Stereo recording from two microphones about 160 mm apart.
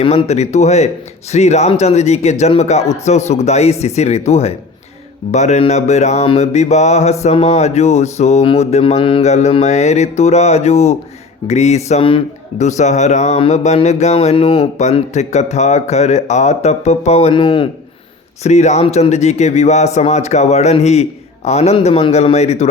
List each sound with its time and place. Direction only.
0.0 s mantra: 40° left (ahead or behind)
4.3 s a man's voice: 40° left (ahead or behind)
5.3 s mantra: 45° left (ahead or behind)
12.6 s mantra: 45° left (ahead or behind)
18.4 s mantra: 45° left (ahead or behind)